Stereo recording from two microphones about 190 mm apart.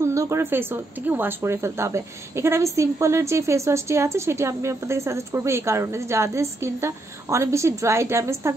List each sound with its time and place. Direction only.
0.0 s speech: 15° right (ahead or behind)